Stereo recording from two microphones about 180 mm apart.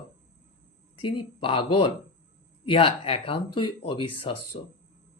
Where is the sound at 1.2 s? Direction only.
30° left (ahead or behind).